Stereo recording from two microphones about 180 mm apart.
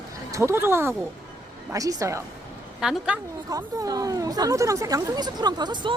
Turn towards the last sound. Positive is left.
turn(degrees=-25)  # may be behind; listen again after turning